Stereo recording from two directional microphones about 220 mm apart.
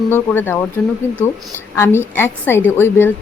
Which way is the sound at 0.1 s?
10° left (ahead or behind).